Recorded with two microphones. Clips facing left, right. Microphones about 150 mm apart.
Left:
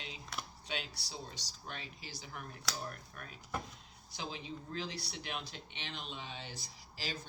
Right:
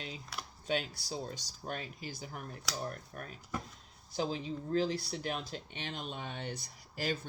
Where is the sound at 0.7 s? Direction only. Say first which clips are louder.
Right 10 dB; 45° right (ahead or behind).